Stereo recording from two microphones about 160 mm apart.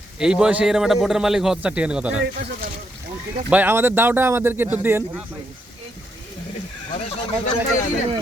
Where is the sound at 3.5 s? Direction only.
10° right (ahead or behind).